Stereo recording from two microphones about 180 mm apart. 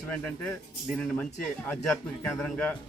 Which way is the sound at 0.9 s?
5° left (ahead or behind).